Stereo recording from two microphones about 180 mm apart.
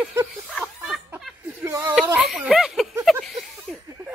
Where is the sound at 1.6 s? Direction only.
15° right (ahead or behind).